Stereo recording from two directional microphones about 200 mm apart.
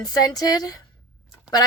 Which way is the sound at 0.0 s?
20° left (ahead or behind).